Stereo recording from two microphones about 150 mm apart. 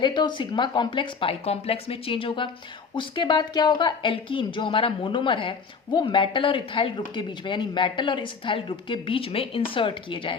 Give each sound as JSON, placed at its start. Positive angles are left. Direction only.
{"t": 0.0, "sound": "speech", "side_deg": 30}